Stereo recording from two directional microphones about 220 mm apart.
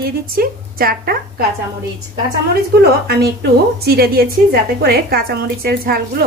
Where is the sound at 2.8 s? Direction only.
45° right (ahead or behind).